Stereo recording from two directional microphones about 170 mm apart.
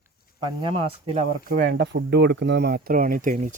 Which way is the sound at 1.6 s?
75° right (ahead or behind).